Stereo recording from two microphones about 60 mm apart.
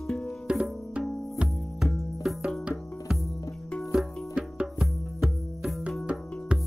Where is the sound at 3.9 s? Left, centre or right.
Centre.